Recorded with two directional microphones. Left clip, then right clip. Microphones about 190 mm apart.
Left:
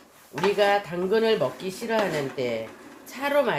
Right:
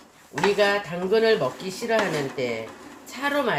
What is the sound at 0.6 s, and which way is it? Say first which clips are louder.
A woman's voice: even; 25° left (ahead or behind).